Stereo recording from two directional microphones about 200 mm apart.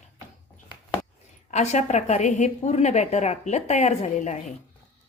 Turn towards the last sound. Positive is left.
turn(degrees=35)  # may be behind; listen again after turning